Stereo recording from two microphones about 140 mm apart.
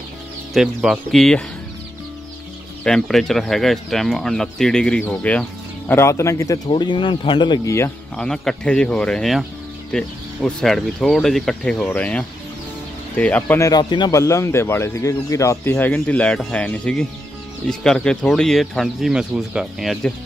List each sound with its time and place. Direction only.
0.8 s speech: centre (ahead or behind)
2.8 s speech: 5° left (ahead or behind); by 6.6 s 20° left (ahead or behind)
6.7 s speech: 35° left (ahead or behind)
8.2 s speech: 5° left (ahead or behind)
13.6 s speech: 30° left (ahead or behind)
14.1 s speech: 20° left (ahead or behind); by 20.1 s centre (ahead or behind)